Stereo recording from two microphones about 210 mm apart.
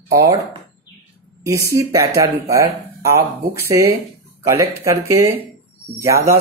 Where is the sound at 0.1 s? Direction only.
15° right (ahead or behind).